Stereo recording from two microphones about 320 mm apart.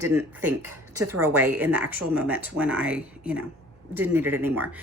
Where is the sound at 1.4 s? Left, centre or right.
Centre.